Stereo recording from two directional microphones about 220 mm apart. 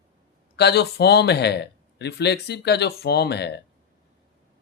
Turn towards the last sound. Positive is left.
turn(degrees=50)  # may be behind; listen again after turning